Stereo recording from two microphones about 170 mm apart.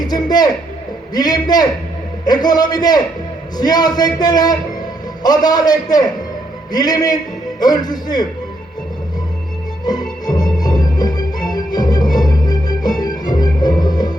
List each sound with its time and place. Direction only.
0.0 s music: 25° left (ahead or behind)
1.1 s a man's voice: 25° left (ahead or behind)
9.8 s music: 25° left (ahead or behind)